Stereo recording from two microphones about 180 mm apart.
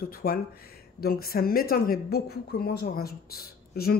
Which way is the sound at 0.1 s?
55° left (ahead or behind).